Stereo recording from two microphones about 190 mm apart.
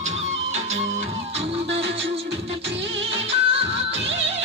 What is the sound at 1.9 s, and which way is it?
Music, 30° right (ahead or behind).